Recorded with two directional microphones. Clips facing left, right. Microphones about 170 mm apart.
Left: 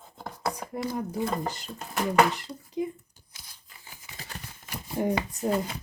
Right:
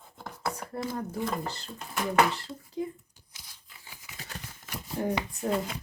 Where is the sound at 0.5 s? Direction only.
15° left (ahead or behind).